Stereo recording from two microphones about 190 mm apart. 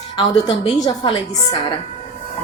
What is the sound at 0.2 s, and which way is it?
Speech, 25° left (ahead or behind).